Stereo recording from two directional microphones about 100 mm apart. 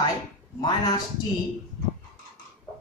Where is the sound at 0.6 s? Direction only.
45° left (ahead or behind).